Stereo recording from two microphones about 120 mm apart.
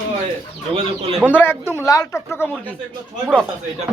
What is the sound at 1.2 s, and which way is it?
Speech, 15° left (ahead or behind).